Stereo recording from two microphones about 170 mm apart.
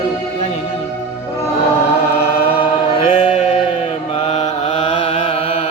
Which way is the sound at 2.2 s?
35° left (ahead or behind).